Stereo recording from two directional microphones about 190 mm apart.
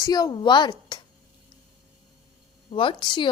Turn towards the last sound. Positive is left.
turn(degrees=25)  # may be behind; listen again after turning